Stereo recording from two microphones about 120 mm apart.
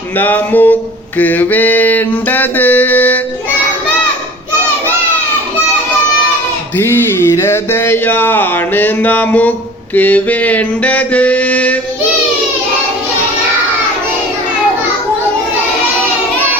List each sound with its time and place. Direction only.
0.2 s mantra: 15° left (ahead or behind)
6.7 s speech: 20° left (ahead or behind)
9.9 s mantra: 15° left (ahead or behind)